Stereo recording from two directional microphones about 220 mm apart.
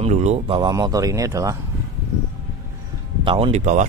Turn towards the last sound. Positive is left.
turn(degrees=-30)  # may be behind; listen again after turning